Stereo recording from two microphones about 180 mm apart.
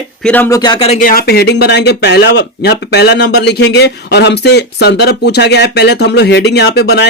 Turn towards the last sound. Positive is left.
turn(degrees=65)  # may be behind; listen again after turning